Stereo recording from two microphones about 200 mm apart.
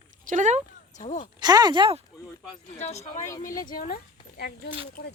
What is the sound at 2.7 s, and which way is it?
Speech, 35° left (ahead or behind).